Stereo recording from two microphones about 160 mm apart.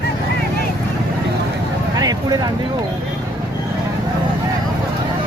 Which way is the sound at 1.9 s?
25° right (ahead or behind).